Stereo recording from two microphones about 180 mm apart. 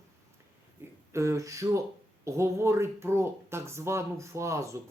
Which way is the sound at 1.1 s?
15° right (ahead or behind).